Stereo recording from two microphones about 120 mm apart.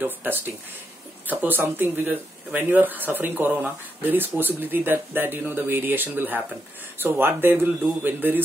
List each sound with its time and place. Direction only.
0.0 s speech: 15° right (ahead or behind)